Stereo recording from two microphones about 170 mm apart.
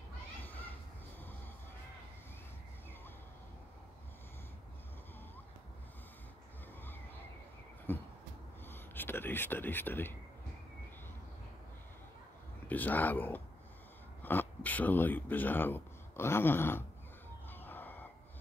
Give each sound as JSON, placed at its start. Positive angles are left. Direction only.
{"t": 0.4, "sound": "children playing", "side_deg": 10}
{"t": 7.9, "sound": "a sound", "side_deg": 10}
{"t": 8.6, "sound": "speech", "side_deg": 10}
{"t": 12.6, "sound": "speech", "side_deg": 10}
{"t": 17.5, "sound": "chicken", "side_deg": 10}